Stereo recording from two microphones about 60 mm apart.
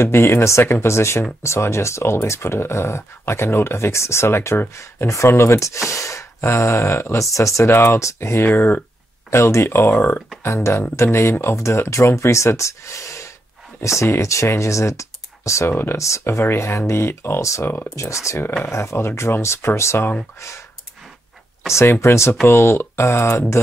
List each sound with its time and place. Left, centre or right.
0.0 s speech: left
5.9 s gasp: left
6.4 s speech: left
8.5 s speech: left
9.3 s speech: left
22.0 s speech: left